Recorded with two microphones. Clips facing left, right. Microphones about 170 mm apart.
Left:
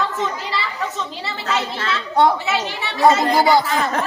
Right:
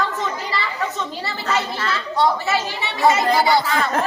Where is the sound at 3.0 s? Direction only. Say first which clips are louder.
Left 2 dB; 45° left (ahead or behind).